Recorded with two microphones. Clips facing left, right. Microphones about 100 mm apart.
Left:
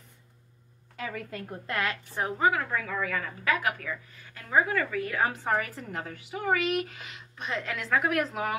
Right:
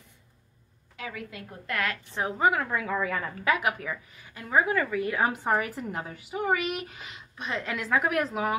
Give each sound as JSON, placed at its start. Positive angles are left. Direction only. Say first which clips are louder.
{"t": 0.9, "sound": "a woman's voice", "louder": "left 2 dB", "side_deg": 40}
{"t": 1.7, "sound": "a woman's voice", "louder": "even", "side_deg": 25}
{"t": 2.3, "sound": "a woman's voice", "louder": "right 1 dB", "side_deg": -10}
{"t": 3.0, "sound": "a woman's voice", "louder": "right 2 dB", "side_deg": -25}